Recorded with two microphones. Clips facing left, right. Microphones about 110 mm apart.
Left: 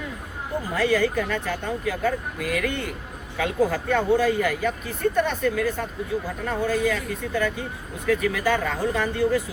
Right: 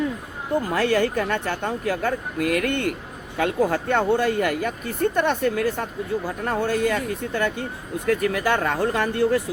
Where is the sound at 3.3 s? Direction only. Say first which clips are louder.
Right 2 dB; 55° right (ahead or behind).